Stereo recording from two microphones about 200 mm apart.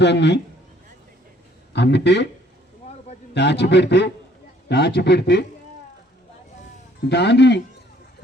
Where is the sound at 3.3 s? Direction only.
60° left (ahead or behind).